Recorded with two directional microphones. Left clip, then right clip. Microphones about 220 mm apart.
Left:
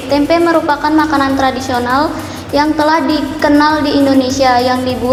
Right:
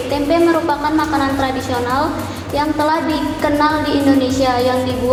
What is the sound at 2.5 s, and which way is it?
A woman's voice, 50° left (ahead or behind).